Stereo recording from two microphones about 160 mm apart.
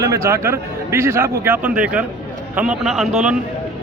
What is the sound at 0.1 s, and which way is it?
A man's voice, 20° right (ahead or behind).